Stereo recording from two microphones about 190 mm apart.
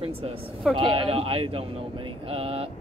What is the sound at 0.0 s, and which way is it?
A woman's voice, 30° right (ahead or behind).